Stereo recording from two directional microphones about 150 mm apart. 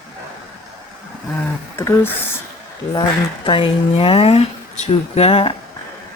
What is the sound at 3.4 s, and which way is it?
Speech, 35° left (ahead or behind).